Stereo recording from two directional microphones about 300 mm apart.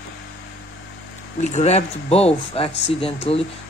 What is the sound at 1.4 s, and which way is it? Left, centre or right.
Speech, left.